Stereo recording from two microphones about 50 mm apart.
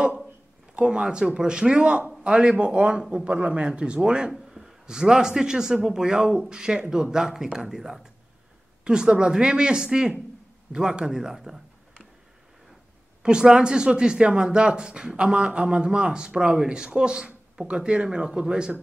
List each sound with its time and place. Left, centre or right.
0.7 s a man's voice: centre
13.2 s speech: centre